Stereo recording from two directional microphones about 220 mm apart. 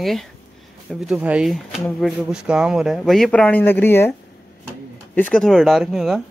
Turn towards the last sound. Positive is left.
turn(degrees=0)  # may be behind; listen again after turning